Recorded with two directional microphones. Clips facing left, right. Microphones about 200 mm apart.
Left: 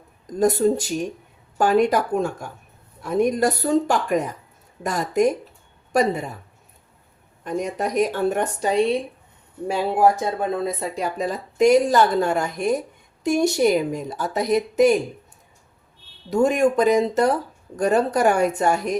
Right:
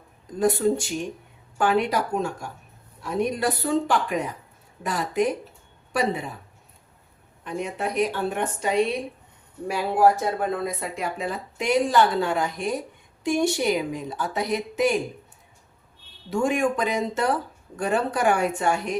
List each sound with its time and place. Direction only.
0.3 s a woman's voice: 40° left (ahead or behind)
7.4 s a woman's voice: 40° left (ahead or behind)
16.3 s speech: 40° left (ahead or behind)